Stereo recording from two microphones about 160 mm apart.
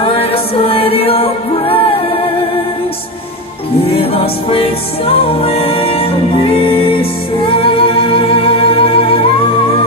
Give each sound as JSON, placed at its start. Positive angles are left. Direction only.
{"t": 0.0, "sound": "music", "side_deg": 35}
{"t": 3.8, "sound": "music", "side_deg": 35}